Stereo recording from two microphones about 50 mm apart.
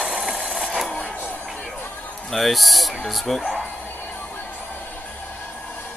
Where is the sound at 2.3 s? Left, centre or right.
Centre.